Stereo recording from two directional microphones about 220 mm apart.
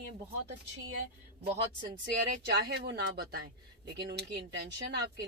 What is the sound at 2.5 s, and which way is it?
A woman's voice, 45° right (ahead or behind).